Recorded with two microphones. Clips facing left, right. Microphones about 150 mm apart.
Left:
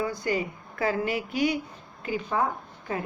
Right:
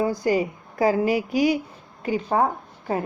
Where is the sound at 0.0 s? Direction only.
40° right (ahead or behind).